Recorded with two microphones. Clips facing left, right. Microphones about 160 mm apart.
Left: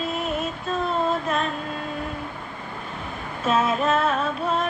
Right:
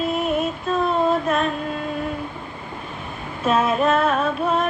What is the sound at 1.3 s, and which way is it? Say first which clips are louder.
Carnatic music: right 4 dB; 60° right (ahead or behind).